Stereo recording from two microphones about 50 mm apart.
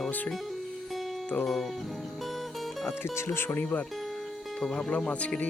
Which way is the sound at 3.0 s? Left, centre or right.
Left.